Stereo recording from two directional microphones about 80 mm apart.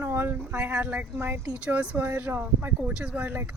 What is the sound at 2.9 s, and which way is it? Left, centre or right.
Speech, centre.